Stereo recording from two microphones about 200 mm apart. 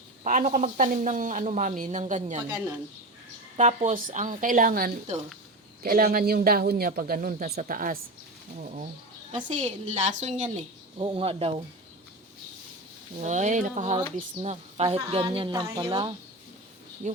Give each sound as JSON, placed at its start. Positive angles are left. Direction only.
{"t": 0.3, "sound": "speech", "side_deg": -40}
{"t": 3.6, "sound": "speech", "side_deg": -35}
{"t": 9.5, "sound": "speech", "side_deg": -35}
{"t": 13.2, "sound": "speech", "side_deg": -35}